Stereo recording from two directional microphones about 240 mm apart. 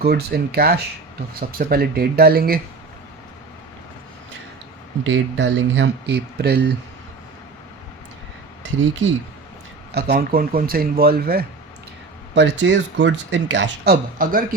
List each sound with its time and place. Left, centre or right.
0.0 s speech: right
5.0 s speech: right
9.9 s speech: right